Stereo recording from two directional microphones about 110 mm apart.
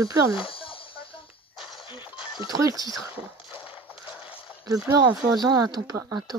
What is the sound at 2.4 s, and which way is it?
Speech, 35° right (ahead or behind).